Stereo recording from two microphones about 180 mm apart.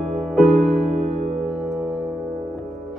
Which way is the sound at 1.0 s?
40° right (ahead or behind).